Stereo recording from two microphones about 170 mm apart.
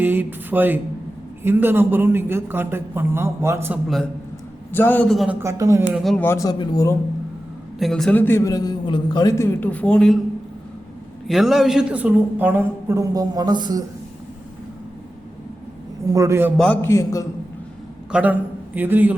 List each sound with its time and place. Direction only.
0.0 s a man's voice: 10° right (ahead or behind)
3.8 s a man's voice: centre (ahead or behind)
5.4 s a man's voice: 15° right (ahead or behind)
5.8 s a man's voice: 5° right (ahead or behind)
6.2 s a man's voice: 20° left (ahead or behind)
7.8 s a man's voice: centre (ahead or behind)
11.3 s a man's voice: centre (ahead or behind); by 13.8 s 25° right (ahead or behind)
16.0 s a man's voice: 20° right (ahead or behind)
16.6 s a man's voice: 10° left (ahead or behind)
18.1 s a man's voice: 10° right (ahead or behind)